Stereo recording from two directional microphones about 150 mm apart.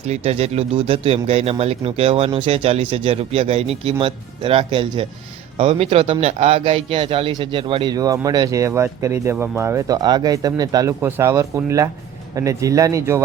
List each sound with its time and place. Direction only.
0.1 s speech: 45° right (ahead or behind); by 13.2 s 20° right (ahead or behind)